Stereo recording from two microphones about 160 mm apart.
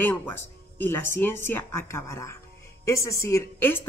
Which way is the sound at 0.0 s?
15° left (ahead or behind).